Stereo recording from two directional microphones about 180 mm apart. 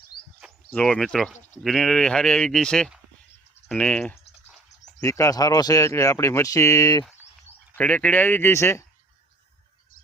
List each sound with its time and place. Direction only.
0.7 s speech: 5° left (ahead or behind)
4.9 s speech: 15° left (ahead or behind)